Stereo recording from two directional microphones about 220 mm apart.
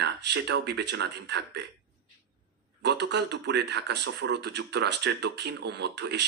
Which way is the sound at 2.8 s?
50° right (ahead or behind).